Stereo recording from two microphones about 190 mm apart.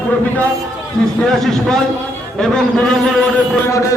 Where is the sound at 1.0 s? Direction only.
5° left (ahead or behind).